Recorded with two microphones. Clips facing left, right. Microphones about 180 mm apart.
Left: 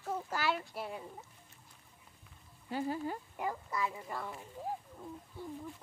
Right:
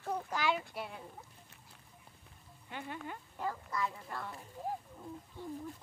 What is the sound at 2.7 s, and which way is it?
Speech, 35° left (ahead or behind).